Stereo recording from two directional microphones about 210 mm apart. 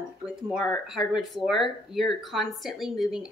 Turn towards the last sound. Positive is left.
turn(degrees=0)  # may be behind; listen again after turning